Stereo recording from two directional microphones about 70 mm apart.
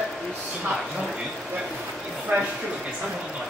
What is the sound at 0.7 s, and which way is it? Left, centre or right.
Speech, centre.